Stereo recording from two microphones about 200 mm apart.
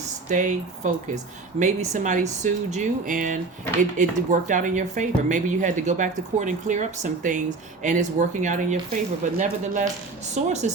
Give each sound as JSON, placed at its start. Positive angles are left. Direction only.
{"t": 0.3, "sound": "speech", "side_deg": -40}